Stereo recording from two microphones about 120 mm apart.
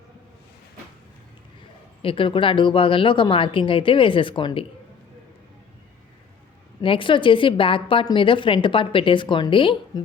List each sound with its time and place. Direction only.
2.0 s a woman's voice: 50° left (ahead or behind)
6.8 s a woman's voice: 45° left (ahead or behind)
9.9 s a woman's voice: 30° left (ahead or behind)